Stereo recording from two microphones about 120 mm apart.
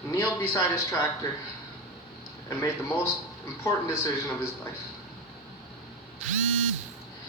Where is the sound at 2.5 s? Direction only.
20° left (ahead or behind).